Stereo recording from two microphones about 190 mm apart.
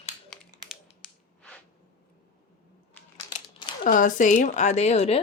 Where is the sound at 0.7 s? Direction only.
Centre (ahead or behind).